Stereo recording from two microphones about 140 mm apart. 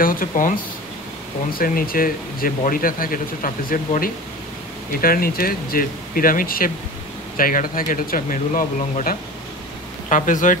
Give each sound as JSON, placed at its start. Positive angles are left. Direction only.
{"t": 0.0, "sound": "speech", "side_deg": 90}
{"t": 1.5, "sound": "speech", "side_deg": 90}